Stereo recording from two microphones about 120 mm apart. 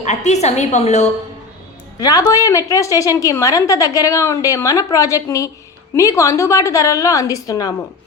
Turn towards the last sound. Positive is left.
turn(degrees=30)  # may be behind; listen again after turning